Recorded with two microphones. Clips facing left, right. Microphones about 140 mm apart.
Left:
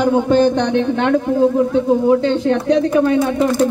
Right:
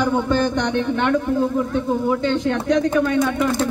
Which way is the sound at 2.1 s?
35° left (ahead or behind).